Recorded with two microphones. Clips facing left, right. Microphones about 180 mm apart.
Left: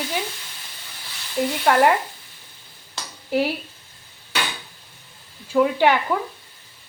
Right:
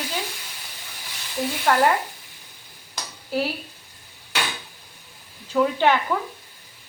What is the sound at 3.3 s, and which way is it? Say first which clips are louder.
Speech: left 4 dB; 15° left (ahead or behind).